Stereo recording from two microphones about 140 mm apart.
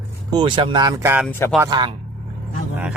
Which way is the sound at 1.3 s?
15° left (ahead or behind).